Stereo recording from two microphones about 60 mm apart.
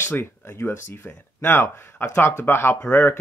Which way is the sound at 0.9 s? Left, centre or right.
Left.